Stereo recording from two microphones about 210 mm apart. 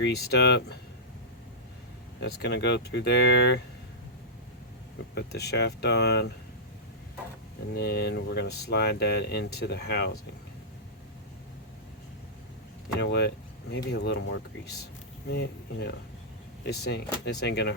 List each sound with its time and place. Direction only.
0.0 s speech: 50° left (ahead or behind)
2.2 s speech: 50° left (ahead or behind)
5.1 s speech: 50° left (ahead or behind)
7.8 s speech: 50° left (ahead or behind)
13.0 s speech: 50° left (ahead or behind)